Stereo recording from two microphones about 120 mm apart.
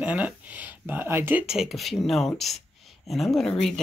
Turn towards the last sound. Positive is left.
turn(degrees=5)  # may be behind; listen again after turning